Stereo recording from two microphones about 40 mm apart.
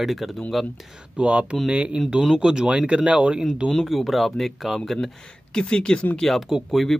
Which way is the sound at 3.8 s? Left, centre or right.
Centre.